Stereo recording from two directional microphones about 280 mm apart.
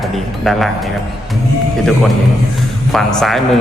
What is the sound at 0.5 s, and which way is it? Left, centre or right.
Speech, centre.